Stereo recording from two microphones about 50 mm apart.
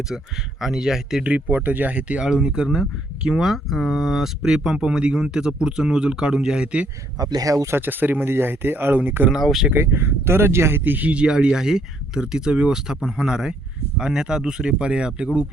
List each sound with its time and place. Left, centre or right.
0.1 s speech: centre
0.6 s speech: centre
1.5 s speech: right
2.2 s speech: centre
7.8 s speech: right
9.3 s speech: centre
9.7 s speech: right
11.1 s speech: centre